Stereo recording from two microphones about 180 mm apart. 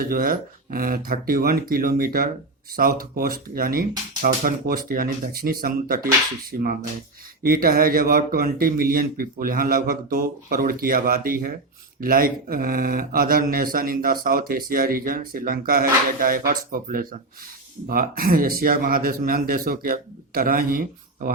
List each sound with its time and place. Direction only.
0.0 s speech: 50° right (ahead or behind)
7.4 s speech: 55° right (ahead or behind)